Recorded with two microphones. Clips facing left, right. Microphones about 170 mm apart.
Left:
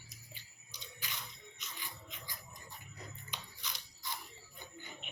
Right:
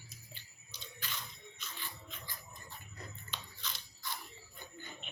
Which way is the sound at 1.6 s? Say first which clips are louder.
Right 1 dB; 15° left (ahead or behind).